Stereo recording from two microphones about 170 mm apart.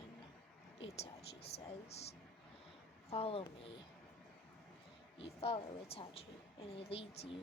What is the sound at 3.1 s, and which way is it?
Speech, 35° left (ahead or behind).